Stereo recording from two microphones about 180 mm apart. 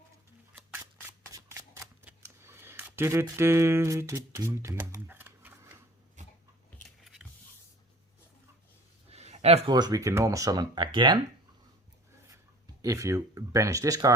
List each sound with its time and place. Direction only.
0.5 s scissors: 10° right (ahead or behind)
1.3 s shuffling cards: 15° right (ahead or behind)
6.2 s a sound: 45° right (ahead or behind)
6.8 s biting: centre (ahead or behind)
9.0 s a sound: 35° right (ahead or behind)
9.7 s speech: 20° right (ahead or behind)
12.8 s speech: 15° right (ahead or behind)